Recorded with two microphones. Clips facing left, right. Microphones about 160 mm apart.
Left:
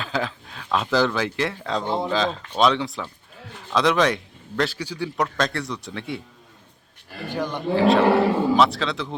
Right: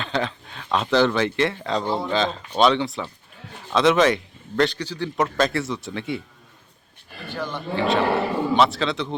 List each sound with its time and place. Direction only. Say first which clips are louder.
0.0 s speech: right 1 dB; centre (ahead or behind)
5.1 s speech: right 3 dB; centre (ahead or behind)
7.3 s speech: left 3 dB; 15° left (ahead or behind)
7.8 s speech: left 4 dB; centre (ahead or behind)